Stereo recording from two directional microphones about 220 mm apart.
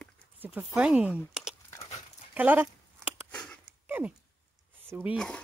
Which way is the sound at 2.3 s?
10° right (ahead or behind).